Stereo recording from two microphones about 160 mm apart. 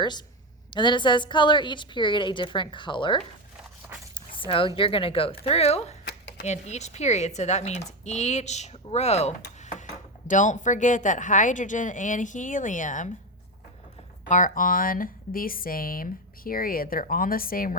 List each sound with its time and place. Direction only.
0.0 s a woman's voice: 25° left (ahead or behind)
4.4 s speech: 35° left (ahead or behind)
6.1 s a sound: 90° left
6.4 s speech: 45° left (ahead or behind)
9.6 s a sound: 50° left (ahead or behind)
10.2 s speech: 50° left (ahead or behind)
14.3 s speech: 50° left (ahead or behind)